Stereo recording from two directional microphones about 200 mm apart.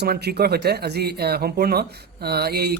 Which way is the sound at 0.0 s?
55° right (ahead or behind).